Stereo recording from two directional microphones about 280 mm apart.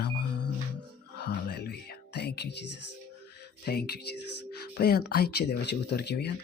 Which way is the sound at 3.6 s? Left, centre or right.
Left.